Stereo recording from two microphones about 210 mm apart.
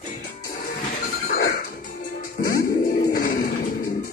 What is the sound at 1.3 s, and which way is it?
Music, 45° left (ahead or behind).